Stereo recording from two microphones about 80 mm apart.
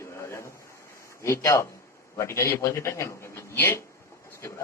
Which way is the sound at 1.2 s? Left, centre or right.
Left.